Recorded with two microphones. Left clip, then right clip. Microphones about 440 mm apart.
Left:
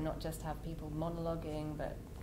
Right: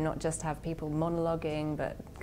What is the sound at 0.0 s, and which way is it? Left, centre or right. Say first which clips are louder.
A woman's voice: right 8 dB; right.